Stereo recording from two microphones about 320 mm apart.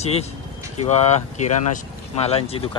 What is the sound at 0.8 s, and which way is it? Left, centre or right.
Speech, left.